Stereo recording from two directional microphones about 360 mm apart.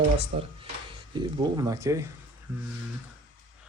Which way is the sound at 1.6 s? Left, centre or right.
Centre.